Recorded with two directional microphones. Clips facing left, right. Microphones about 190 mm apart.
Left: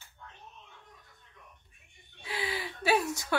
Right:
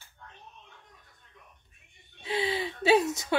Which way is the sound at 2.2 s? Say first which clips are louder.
Right 6 dB; 25° right (ahead or behind).